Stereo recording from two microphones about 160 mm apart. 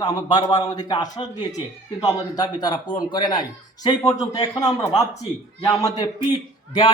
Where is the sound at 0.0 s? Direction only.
25° left (ahead or behind).